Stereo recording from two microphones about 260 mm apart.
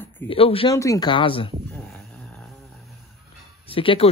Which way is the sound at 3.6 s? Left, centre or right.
Left.